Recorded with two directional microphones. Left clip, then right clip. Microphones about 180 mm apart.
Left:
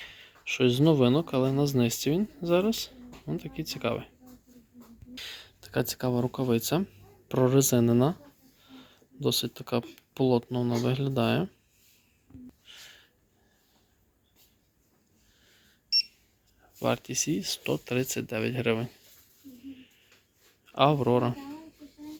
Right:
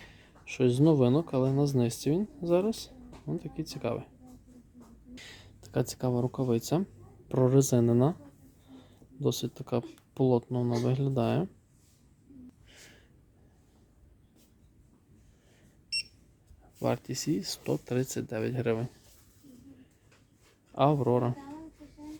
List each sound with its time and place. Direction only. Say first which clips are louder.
0.0 s speech: left 9 dB; 5° right (ahead or behind)
5.1 s speech: left 8 dB; 10° right (ahead or behind)
12.6 s gasp: left 6 dB; 15° right (ahead or behind)
16.8 s speech: left 3 dB; 10° right (ahead or behind)
20.7 s speech: left 3 dB; 5° right (ahead or behind)